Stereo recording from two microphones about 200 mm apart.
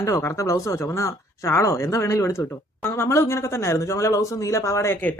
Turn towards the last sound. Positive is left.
turn(degrees=10)  # may be behind; listen again after turning